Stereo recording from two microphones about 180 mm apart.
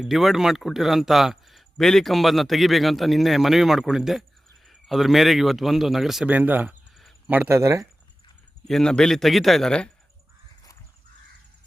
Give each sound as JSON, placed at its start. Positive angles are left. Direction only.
{"t": 0.0, "sound": "speech", "side_deg": 0}
{"t": 8.6, "sound": "speech", "side_deg": 5}